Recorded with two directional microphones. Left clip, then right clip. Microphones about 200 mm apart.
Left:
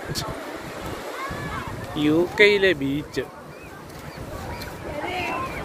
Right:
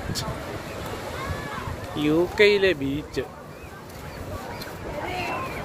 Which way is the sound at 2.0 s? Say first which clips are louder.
Left 2 dB; centre (ahead or behind).